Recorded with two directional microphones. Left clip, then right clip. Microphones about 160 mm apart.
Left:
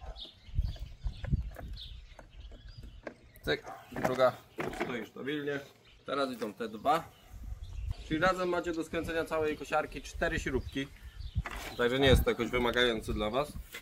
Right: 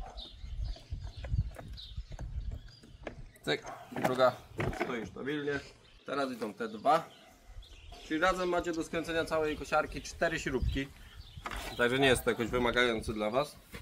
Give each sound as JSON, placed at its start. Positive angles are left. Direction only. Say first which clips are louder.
{"t": 3.6, "sound": "speech", "louder": "right 1 dB", "side_deg": 0}
{"t": 4.1, "sound": "speech", "louder": "even", "side_deg": 15}
{"t": 4.6, "sound": "speech", "louder": "right 1 dB", "side_deg": -5}
{"t": 4.8, "sound": "a man's voice", "louder": "even", "side_deg": 5}
{"t": 6.4, "sound": "a man's voice", "louder": "right 1 dB", "side_deg": -10}
{"t": 8.1, "sound": "speech", "louder": "even", "side_deg": -5}
{"t": 11.4, "sound": "a sound", "louder": "right 1 dB", "side_deg": -20}
{"t": 12.3, "sound": "speech", "louder": "even", "side_deg": 0}